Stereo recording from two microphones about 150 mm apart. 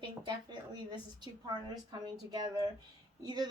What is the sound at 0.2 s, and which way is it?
A woman's voice, 30° right (ahead or behind).